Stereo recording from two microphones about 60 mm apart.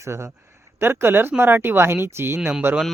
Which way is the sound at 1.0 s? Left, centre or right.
Right.